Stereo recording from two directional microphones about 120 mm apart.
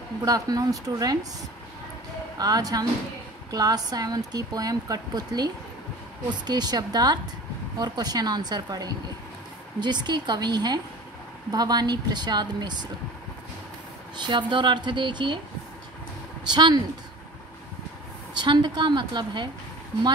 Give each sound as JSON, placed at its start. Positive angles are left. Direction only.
{"t": 0.2, "sound": "speech", "side_deg": -30}
{"t": 2.3, "sound": "speech", "side_deg": -30}
{"t": 14.1, "sound": "speech", "side_deg": -40}
{"t": 16.4, "sound": "speech", "side_deg": -35}
{"t": 18.3, "sound": "speech", "side_deg": -40}